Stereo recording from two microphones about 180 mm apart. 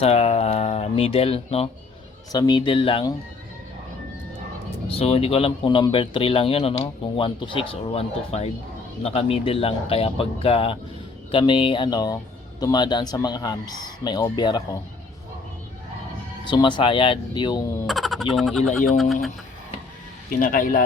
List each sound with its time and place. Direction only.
0.0 s a man's voice: 35° left (ahead or behind)
2.3 s speech: 20° left (ahead or behind)
4.9 s a man's voice: 35° left (ahead or behind)
16.5 s speech: 25° left (ahead or behind)
17.8 s speech: centre (ahead or behind)
20.4 s speech: 50° left (ahead or behind)